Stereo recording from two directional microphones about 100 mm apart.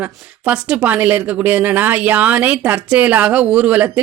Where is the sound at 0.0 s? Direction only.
10° right (ahead or behind).